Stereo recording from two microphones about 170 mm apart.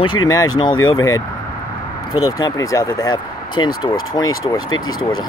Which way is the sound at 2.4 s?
20° left (ahead or behind).